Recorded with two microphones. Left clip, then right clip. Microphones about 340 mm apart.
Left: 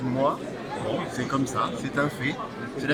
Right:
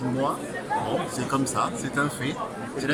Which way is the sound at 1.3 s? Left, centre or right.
Centre.